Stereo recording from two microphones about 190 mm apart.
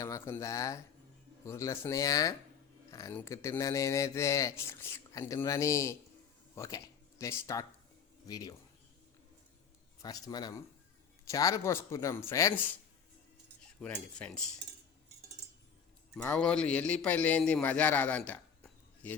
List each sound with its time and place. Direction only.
0.0 s speech: 15° left (ahead or behind)
10.0 s speech: 20° left (ahead or behind)
13.8 s speech: 5° left (ahead or behind)
16.1 s a man's voice: 10° left (ahead or behind)